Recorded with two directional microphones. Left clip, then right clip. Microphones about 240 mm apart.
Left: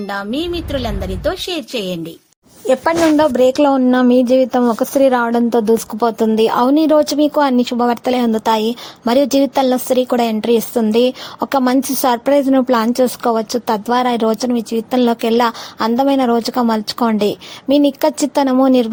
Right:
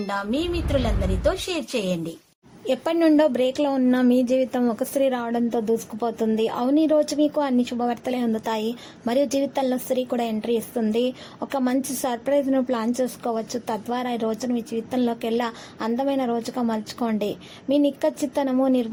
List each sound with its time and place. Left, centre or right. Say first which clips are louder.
0.1 s a woman's voice: left 5 dB; left
3.3 s speech: left 10 dB; left
3.8 s speech: left 8 dB; centre